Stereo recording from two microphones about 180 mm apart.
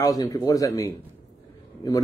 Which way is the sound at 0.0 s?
20° left (ahead or behind).